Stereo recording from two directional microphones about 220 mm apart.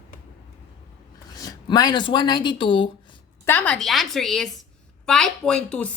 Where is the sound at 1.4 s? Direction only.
15° left (ahead or behind).